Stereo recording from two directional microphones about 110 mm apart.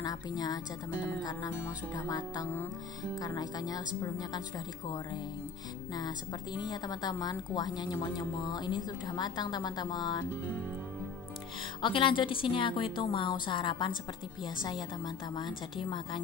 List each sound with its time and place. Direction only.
0.0 s a woman's voice: 35° left (ahead or behind)
2.0 s a woman's voice: 40° left (ahead or behind)
5.9 s a woman's voice: 40° left (ahead or behind)
11.8 s a woman's voice: 50° left (ahead or behind)